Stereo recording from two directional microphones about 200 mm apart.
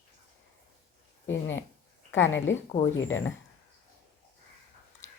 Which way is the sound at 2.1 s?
70° left (ahead or behind).